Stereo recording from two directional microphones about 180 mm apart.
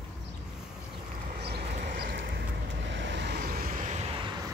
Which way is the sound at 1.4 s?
60° right (ahead or behind).